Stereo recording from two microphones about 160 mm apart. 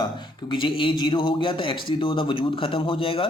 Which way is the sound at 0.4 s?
30° left (ahead or behind).